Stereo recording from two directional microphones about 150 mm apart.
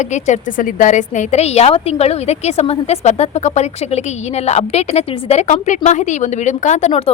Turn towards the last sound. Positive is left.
turn(degrees=45)  # may be behind; listen again after turning